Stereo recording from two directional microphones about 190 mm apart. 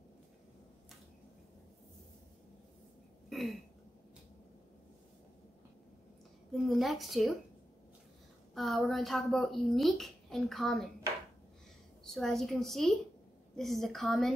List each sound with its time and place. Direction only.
3.3 s throat clearing: centre (ahead or behind)
6.5 s a woman's voice: centre (ahead or behind)
8.5 s speech: centre (ahead or behind)
12.0 s speech: centre (ahead or behind)